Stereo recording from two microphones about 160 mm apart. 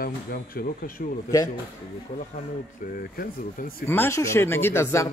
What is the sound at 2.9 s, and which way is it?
Speech, 65° left (ahead or behind).